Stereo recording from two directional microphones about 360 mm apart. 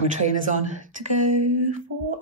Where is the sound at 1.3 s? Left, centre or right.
Centre.